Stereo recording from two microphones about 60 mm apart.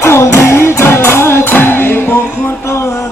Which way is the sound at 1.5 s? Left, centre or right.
Left.